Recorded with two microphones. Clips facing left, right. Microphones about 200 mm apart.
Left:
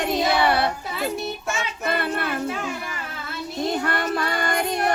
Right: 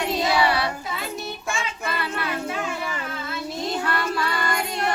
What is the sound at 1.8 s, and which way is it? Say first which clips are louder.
Child singing: left 6 dB; 55° left (ahead or behind).